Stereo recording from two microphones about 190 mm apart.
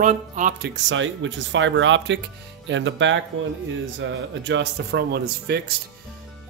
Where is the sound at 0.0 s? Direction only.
45° right (ahead or behind).